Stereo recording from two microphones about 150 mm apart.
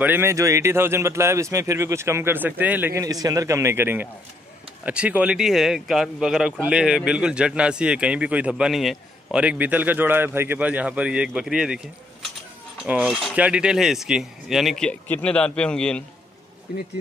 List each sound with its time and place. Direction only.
0.0 s a man's voice: 15° right (ahead or behind)
12.8 s speech: 5° right (ahead or behind)